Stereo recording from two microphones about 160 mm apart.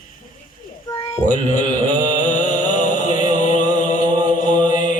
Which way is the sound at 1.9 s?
55° left (ahead or behind).